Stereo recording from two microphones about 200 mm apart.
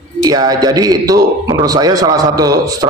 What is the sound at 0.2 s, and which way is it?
A man's voice, 20° right (ahead or behind).